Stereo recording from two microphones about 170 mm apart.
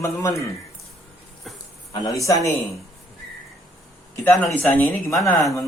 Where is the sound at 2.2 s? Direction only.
20° left (ahead or behind).